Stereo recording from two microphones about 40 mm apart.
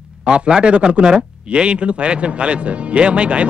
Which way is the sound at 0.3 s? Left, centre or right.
Right.